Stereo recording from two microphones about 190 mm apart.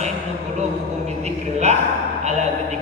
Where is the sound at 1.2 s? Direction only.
35° right (ahead or behind).